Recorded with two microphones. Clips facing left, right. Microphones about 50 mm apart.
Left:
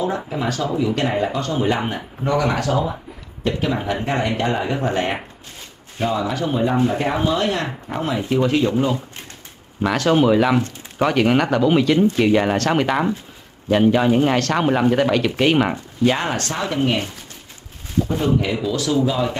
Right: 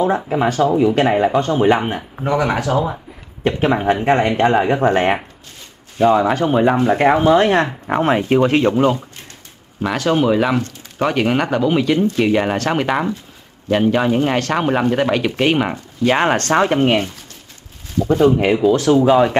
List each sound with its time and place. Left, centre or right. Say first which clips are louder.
0.3 s speech: right 7 dB; right
3.4 s speech: right 6 dB; right
9.8 s speech: even; centre
16.1 s speech: right 8 dB; right
18.4 s speech: right 8 dB; right